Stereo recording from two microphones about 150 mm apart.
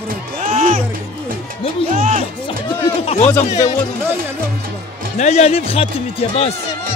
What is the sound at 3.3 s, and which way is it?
Speech, 20° left (ahead or behind).